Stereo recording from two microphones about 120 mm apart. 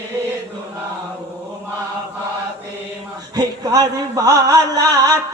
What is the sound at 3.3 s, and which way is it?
Chant, 35° right (ahead or behind).